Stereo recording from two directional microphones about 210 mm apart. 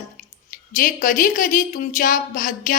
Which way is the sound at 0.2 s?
40° left (ahead or behind).